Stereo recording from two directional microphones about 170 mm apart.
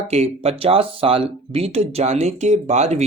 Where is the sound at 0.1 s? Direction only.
40° right (ahead or behind).